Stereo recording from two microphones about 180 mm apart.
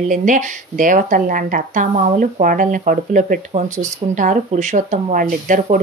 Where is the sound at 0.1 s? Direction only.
45° right (ahead or behind).